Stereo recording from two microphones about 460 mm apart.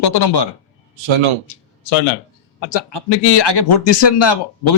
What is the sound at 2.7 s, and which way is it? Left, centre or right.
Speech, left.